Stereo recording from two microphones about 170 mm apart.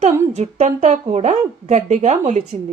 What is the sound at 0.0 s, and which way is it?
Speech, 45° right (ahead or behind).